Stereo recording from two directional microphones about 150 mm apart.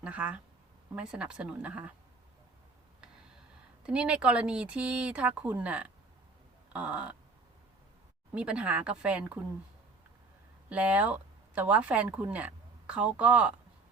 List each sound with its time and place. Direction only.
0.0 s speech: 10° right (ahead or behind)
3.8 s speech: 5° right (ahead or behind)
8.4 s speech: 5° right (ahead or behind)
10.7 s speech: 10° right (ahead or behind)